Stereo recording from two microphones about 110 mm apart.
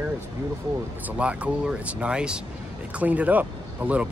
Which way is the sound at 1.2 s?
10° right (ahead or behind).